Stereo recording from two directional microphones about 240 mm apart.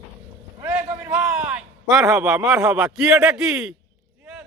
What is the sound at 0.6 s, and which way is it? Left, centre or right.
Vehicle, centre.